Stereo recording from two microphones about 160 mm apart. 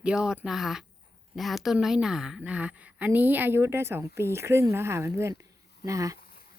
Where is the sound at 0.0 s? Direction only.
5° right (ahead or behind).